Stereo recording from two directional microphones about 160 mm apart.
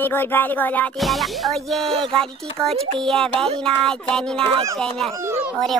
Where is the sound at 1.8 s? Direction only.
35° right (ahead or behind).